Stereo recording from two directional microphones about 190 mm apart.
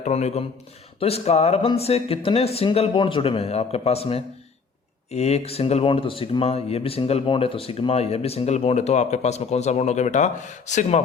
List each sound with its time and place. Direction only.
0.0 s speech: 35° left (ahead or behind)